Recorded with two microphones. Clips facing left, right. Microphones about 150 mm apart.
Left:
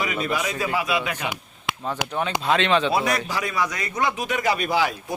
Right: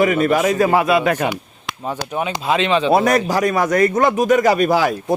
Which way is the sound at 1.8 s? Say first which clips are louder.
Right 4 dB; 10° right (ahead or behind).